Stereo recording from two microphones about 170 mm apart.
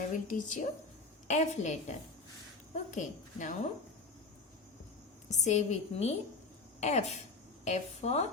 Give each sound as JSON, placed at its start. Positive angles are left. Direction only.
{"t": 0.1, "sound": "a woman's voice", "side_deg": 50}
{"t": 5.3, "sound": "a woman's voice", "side_deg": 45}